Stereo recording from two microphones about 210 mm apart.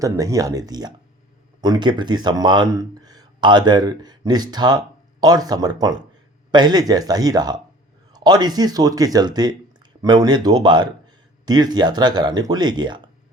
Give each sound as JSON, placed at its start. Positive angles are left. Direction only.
{"t": 0.0, "sound": "speech", "side_deg": -15}